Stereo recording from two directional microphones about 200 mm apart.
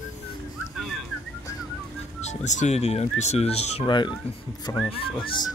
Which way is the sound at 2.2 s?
35° left (ahead or behind).